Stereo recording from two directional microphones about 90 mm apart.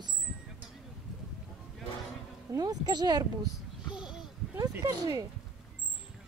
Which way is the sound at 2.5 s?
45° right (ahead or behind).